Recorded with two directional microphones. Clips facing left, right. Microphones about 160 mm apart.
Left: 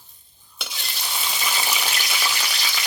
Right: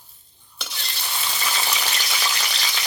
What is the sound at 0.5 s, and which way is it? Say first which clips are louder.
Frying: even; 10° left (ahead or behind).